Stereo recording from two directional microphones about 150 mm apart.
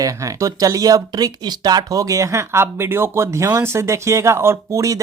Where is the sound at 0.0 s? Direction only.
20° right (ahead or behind).